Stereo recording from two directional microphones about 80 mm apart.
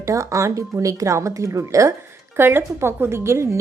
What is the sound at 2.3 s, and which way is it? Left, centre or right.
A woman's voice, right.